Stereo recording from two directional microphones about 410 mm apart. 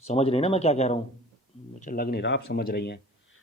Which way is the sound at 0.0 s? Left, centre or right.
Centre.